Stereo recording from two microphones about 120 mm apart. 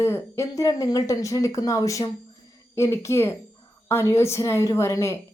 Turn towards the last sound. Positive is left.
turn(degrees=25)  # may be behind; listen again after turning